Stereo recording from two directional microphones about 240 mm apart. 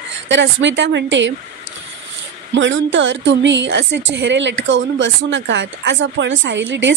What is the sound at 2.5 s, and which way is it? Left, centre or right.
A woman's voice, right.